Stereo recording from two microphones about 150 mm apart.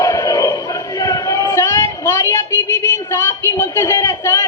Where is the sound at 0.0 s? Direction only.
25° left (ahead or behind).